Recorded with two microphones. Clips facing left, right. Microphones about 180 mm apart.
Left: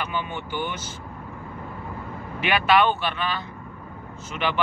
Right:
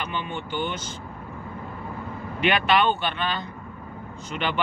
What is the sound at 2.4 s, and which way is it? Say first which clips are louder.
Speech: left 1 dB; 5° left (ahead or behind).